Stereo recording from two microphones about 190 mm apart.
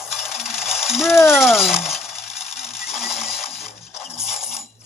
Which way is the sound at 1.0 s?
15° left (ahead or behind).